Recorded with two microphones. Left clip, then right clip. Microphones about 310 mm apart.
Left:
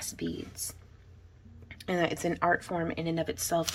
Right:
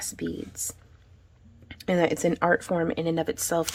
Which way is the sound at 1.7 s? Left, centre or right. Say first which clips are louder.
Right 6 dB; right.